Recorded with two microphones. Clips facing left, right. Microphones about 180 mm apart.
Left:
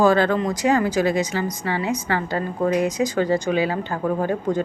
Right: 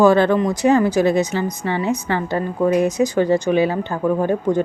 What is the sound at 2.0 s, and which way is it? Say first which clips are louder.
Speech: right 3 dB; 20° right (ahead or behind).